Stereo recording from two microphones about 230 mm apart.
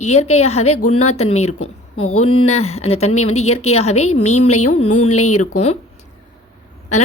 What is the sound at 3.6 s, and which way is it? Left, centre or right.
A woman's voice, left.